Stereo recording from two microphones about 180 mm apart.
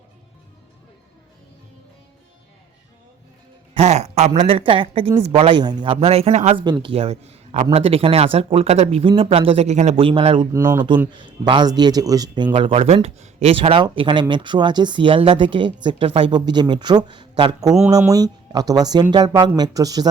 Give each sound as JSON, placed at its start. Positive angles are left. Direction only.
{"t": 3.8, "sound": "speech", "side_deg": -35}
{"t": 6.7, "sound": "speech", "side_deg": -25}
{"t": 10.5, "sound": "speech", "side_deg": -15}
{"t": 11.1, "sound": "speech", "side_deg": -25}